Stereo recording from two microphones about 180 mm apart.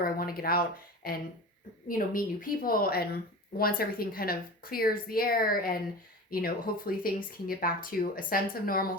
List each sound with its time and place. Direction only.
0.0 s a woman's voice: 55° left (ahead or behind)